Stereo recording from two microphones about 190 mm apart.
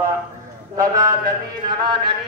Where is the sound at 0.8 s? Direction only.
20° right (ahead or behind).